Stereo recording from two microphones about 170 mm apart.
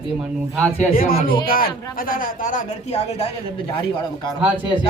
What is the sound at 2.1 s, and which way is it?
Speech, 55° left (ahead or behind).